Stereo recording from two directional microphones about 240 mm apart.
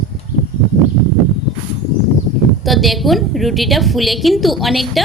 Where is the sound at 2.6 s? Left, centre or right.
Centre.